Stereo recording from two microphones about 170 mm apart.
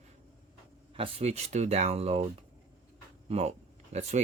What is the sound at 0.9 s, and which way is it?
Speech, 35° right (ahead or behind).